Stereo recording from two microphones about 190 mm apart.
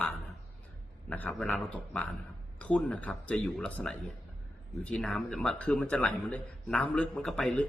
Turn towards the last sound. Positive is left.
turn(degrees=5)  # may be behind; listen again after turning